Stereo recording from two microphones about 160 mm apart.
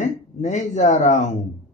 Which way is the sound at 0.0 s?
45° left (ahead or behind).